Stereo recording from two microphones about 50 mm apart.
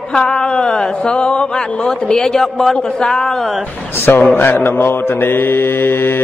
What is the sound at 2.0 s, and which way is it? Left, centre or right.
A man's voice, centre.